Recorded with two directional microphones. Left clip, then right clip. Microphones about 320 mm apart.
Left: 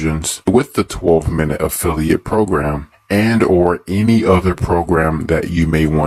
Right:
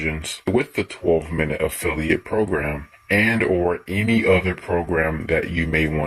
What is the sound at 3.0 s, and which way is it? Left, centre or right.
Speech, left.